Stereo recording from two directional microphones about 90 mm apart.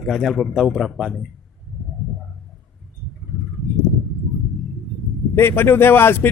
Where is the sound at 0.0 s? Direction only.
Centre (ahead or behind).